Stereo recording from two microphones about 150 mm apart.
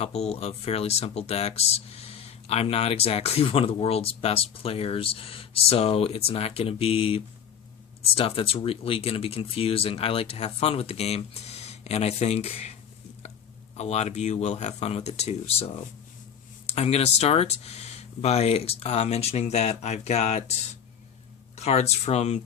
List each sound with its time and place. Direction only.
0.0 s speech: 45° left (ahead or behind)
13.7 s speech: 45° left (ahead or behind)
21.5 s speech: 45° left (ahead or behind)